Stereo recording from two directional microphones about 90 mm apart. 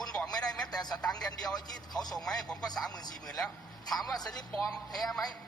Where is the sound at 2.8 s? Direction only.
45° left (ahead or behind).